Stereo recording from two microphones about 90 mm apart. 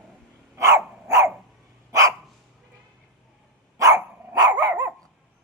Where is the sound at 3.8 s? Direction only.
35° right (ahead or behind).